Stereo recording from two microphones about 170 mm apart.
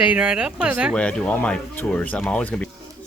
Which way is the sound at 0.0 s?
5° right (ahead or behind).